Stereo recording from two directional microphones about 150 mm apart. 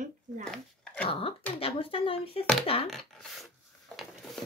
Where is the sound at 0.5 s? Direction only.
5° left (ahead or behind).